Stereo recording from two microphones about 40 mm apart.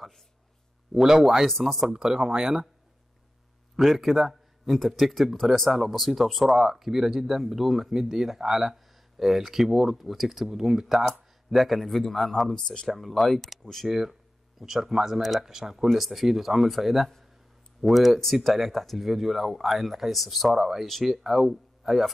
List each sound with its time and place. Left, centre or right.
0.9 s a man's voice: centre
1.9 s speech: centre
3.7 s a man's voice: centre
11.5 s a man's voice: centre
12.5 s speech: centre
12.8 s a man's voice: centre
13.8 s a man's voice: centre